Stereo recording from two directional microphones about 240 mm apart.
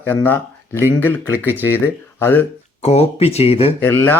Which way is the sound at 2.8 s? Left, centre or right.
Left.